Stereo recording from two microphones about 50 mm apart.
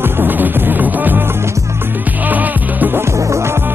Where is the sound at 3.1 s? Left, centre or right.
Right.